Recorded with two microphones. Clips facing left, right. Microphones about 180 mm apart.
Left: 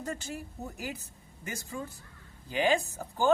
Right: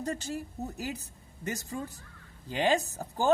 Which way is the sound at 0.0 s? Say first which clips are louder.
Right 3 dB; 35° right (ahead or behind).